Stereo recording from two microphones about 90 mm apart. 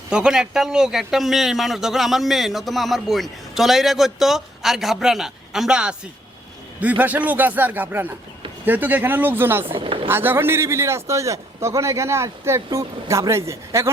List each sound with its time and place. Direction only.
0.1 s a man's voice: 10° right (ahead or behind); by 9.7 s 25° right (ahead or behind)
9.7 s speech: 90° right
10.1 s a man's voice: 25° right (ahead or behind)